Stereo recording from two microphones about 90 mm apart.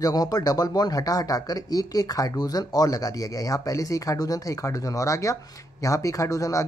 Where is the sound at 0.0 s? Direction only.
45° left (ahead or behind).